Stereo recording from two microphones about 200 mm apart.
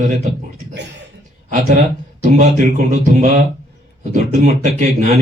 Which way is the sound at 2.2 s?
35° right (ahead or behind).